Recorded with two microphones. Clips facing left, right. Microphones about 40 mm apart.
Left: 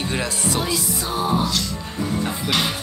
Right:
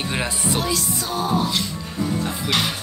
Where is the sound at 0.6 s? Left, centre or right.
Centre.